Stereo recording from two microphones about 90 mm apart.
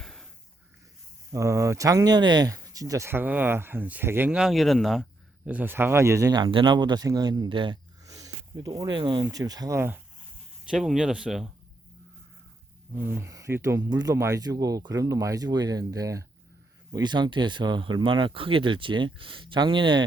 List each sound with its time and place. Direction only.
0.0 s snort: 5° left (ahead or behind)
1.3 s speech: 35° right (ahead or behind); by 2.5 s 55° right (ahead or behind)
2.5 s speech: 40° right (ahead or behind)
3.1 s speech: 20° right (ahead or behind)
4.3 s speech: 5° right (ahead or behind)
5.5 s speech: 20° right (ahead or behind)
6.3 s speech: 65° right (ahead or behind)
8.0 s a sound: 40° right (ahead or behind)
9.0 s speech: 60° right (ahead or behind)
9.2 s speech: 45° right (ahead or behind)
9.7 s speech: 25° right (ahead or behind)
10.7 s speech: 5° right (ahead or behind)
13.0 s speech: 25° right (ahead or behind)
16.9 s speech: 55° right (ahead or behind)